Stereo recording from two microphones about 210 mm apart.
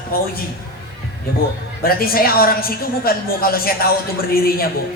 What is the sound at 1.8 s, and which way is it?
A woman's voice, 45° left (ahead or behind).